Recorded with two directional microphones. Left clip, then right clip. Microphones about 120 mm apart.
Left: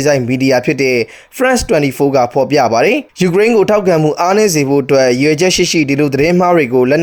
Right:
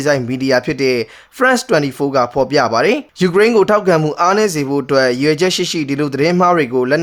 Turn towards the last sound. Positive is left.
turn(degrees=20)  # may be behind; listen again after turning